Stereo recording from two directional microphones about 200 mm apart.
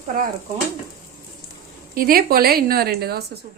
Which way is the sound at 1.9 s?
45° right (ahead or behind).